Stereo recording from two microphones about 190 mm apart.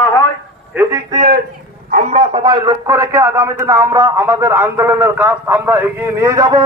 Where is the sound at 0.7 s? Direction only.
10° right (ahead or behind).